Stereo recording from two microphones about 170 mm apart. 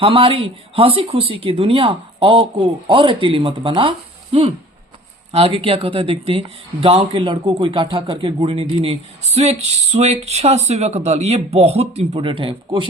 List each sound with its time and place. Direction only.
0.0 s speech: 30° right (ahead or behind)